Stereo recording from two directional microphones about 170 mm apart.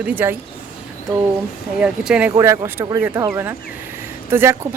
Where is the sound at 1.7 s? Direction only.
5° right (ahead or behind).